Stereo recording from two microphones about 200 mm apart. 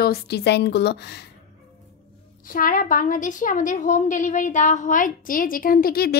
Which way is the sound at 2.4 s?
45° left (ahead or behind).